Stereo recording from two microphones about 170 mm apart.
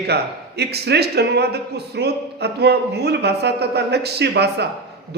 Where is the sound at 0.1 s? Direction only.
75° right (ahead or behind).